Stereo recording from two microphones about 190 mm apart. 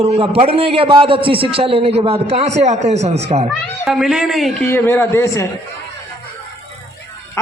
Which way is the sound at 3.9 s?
Centre (ahead or behind).